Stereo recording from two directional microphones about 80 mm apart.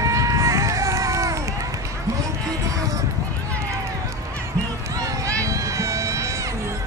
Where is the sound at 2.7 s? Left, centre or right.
Right.